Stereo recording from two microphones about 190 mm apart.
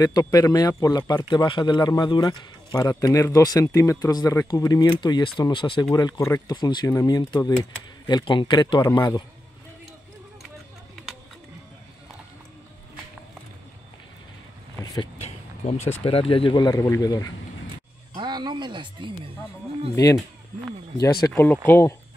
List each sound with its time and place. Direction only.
0.0 s speech: 20° left (ahead or behind)
15.2 s a sound: 35° left (ahead or behind)
16.0 s speech: 30° left (ahead or behind)
18.1 s speech: 20° right (ahead or behind)
21.3 s speech: 10° left (ahead or behind)